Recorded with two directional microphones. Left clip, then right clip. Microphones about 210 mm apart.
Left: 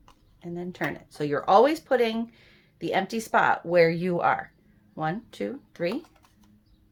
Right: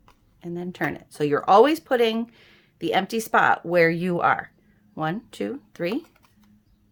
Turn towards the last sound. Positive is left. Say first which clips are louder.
# right 2 dB
turn(degrees=-35)  # may be behind; listen again after turning